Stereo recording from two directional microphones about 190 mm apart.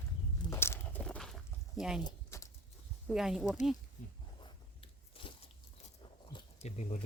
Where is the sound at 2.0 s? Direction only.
15° left (ahead or behind).